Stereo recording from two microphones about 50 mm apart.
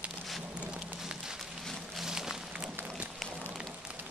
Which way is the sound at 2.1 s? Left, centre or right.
Centre.